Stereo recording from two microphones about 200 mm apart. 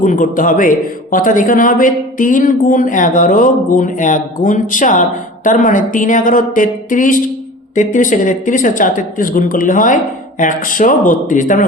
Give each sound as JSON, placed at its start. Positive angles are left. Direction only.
{"t": 0.0, "sound": "a man's voice", "side_deg": 40}